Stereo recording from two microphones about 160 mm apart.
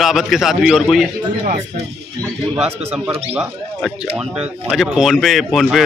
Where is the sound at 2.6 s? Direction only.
15° right (ahead or behind).